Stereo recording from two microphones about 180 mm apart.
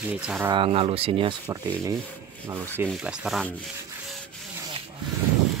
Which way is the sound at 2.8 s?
Centre (ahead or behind).